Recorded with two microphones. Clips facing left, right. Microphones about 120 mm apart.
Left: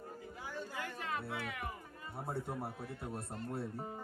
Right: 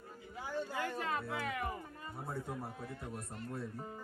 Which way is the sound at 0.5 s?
35° right (ahead or behind).